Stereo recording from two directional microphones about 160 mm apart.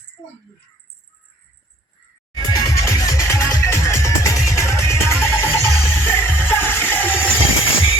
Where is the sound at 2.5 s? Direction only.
20° left (ahead or behind).